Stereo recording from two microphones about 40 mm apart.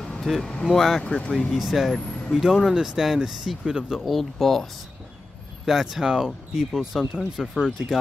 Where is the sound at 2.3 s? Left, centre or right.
Centre.